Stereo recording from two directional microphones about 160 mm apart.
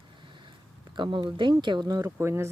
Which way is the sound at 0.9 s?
30° right (ahead or behind).